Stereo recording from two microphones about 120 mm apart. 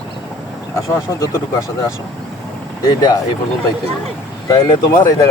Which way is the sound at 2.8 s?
35° left (ahead or behind).